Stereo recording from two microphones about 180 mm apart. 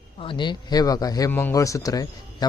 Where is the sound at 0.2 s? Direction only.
25° left (ahead or behind).